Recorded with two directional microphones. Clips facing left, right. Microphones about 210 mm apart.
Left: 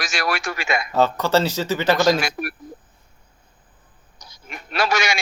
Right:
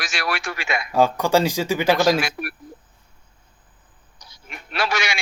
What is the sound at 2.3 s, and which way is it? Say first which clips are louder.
Speech: left 2 dB; 40° left (ahead or behind).